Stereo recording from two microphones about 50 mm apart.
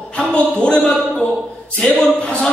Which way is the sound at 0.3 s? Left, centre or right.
Left.